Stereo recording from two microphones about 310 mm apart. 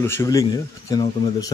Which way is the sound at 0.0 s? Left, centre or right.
Centre.